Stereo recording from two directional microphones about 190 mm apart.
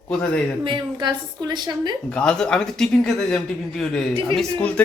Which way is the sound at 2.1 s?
5° left (ahead or behind).